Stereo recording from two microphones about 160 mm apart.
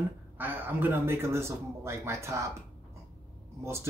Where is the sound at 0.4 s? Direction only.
10° right (ahead or behind).